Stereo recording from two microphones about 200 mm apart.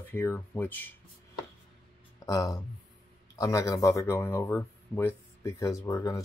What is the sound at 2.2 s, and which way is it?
Speech, 15° left (ahead or behind).